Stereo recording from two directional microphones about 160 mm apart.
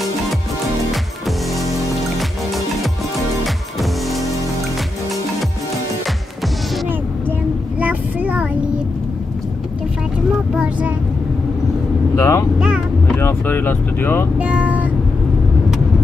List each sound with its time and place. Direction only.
1.6 s music: centre (ahead or behind)
7.8 s child singing: 10° right (ahead or behind)
10.5 s a sound: 5° right (ahead or behind)
12.2 s vehicle: 20° left (ahead or behind)
12.5 s vehicle: 5° right (ahead or behind)
13.2 s speech: 15° left (ahead or behind)
14.4 s vehicle: 10° right (ahead or behind)